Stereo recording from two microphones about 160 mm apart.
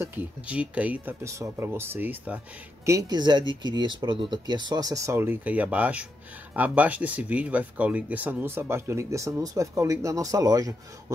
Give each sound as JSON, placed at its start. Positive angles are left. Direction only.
{"t": 0.0, "sound": "speech", "side_deg": -10}